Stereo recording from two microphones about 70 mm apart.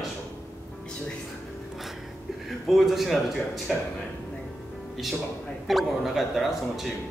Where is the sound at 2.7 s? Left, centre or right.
Centre.